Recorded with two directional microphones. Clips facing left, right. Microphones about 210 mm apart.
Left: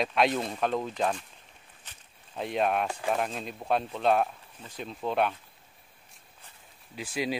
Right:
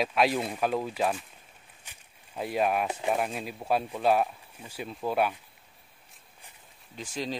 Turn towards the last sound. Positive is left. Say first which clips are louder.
# left 3 dB
turn(degrees=10)  # may be behind; listen again after turning